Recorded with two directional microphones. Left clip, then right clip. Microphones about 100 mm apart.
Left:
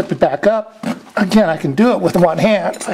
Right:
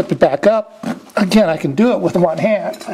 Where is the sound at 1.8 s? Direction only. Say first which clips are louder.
Left 2 dB; 10° left (ahead or behind); by 2.9 s 40° left (ahead or behind).